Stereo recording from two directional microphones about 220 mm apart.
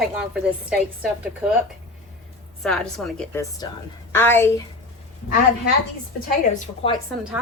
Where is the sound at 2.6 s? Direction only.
5° left (ahead or behind).